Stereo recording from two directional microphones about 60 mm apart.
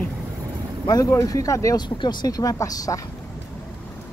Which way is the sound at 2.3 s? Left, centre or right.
Left.